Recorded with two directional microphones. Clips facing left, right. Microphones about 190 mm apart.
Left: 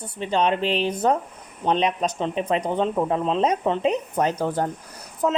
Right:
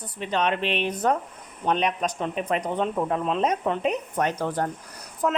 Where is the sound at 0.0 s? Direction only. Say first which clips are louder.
Left 3 dB; 30° left (ahead or behind).